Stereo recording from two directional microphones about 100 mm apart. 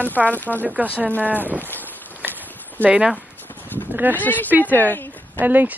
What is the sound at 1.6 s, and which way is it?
Boat, 20° left (ahead or behind).